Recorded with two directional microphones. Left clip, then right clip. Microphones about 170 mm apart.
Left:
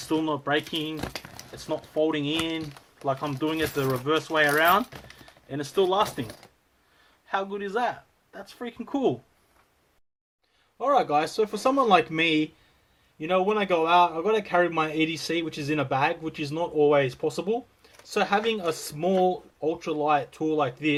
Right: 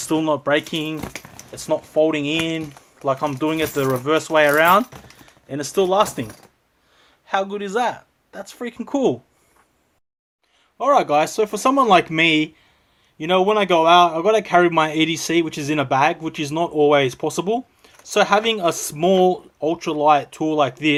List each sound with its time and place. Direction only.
0.0 s a man's voice: 45° right (ahead or behind)
1.0 s a sound: 5° left (ahead or behind)
1.5 s a man's voice: 40° right (ahead or behind)
7.3 s speech: 40° right (ahead or behind)
10.8 s a man's voice: 40° right (ahead or behind)